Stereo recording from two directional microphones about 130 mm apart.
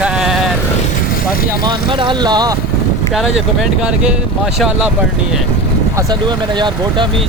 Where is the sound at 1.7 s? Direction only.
35° right (ahead or behind).